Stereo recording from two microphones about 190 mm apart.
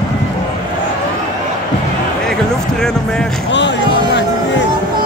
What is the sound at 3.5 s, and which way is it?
Music, 70° left (ahead or behind).